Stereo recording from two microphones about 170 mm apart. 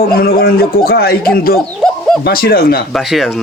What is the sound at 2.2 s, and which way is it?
Speech, 60° left (ahead or behind).